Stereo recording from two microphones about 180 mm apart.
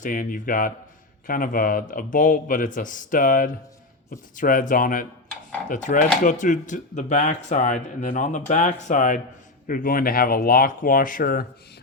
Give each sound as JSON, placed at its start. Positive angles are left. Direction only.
{"t": 0.0, "sound": "speech", "side_deg": 50}